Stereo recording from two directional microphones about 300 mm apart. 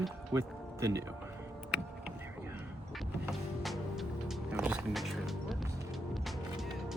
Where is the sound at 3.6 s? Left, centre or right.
Centre.